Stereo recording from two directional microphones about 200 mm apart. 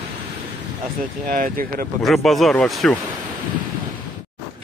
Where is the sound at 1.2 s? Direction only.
45° right (ahead or behind).